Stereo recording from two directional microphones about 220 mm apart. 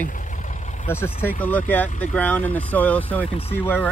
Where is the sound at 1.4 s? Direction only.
10° left (ahead or behind).